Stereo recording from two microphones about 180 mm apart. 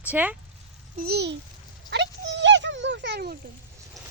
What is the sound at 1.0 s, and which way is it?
Speech, 60° right (ahead or behind).